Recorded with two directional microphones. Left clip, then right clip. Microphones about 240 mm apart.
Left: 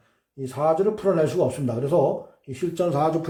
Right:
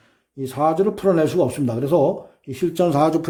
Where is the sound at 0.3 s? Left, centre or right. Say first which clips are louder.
Right 3 dB; right.